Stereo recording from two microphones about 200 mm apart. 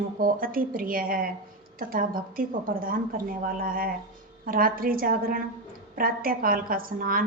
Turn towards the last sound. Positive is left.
turn(degrees=-45)  # may be behind; listen again after turning